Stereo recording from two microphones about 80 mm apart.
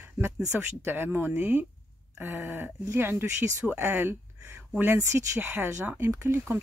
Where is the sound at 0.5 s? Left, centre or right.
Right.